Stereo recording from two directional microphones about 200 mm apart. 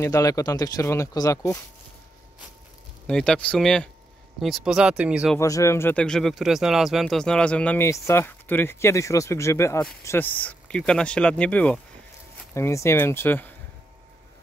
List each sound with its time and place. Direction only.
0.0 s speech: 15° left (ahead or behind)
3.1 s speech: 5° left (ahead or behind)
5.4 s speech: 15° left (ahead or behind)